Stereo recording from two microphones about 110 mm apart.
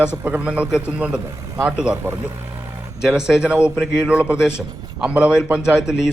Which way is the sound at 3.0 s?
5° right (ahead or behind).